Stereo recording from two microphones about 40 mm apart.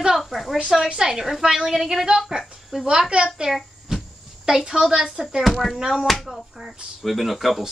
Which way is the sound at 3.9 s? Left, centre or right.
Centre.